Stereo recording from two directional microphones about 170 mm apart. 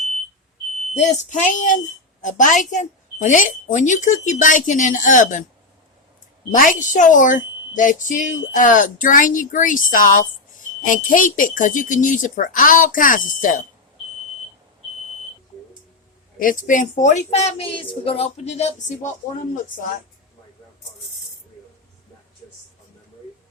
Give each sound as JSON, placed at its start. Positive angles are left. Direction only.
{"t": 0.9, "sound": "a woman's voice", "side_deg": 45}
{"t": 6.5, "sound": "a woman's voice", "side_deg": 50}
{"t": 16.4, "sound": "a woman's voice", "side_deg": 50}